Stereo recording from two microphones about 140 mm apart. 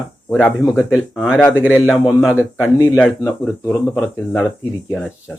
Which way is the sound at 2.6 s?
20° left (ahead or behind).